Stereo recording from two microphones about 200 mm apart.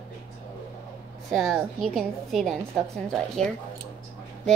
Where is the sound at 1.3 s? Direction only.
Centre (ahead or behind).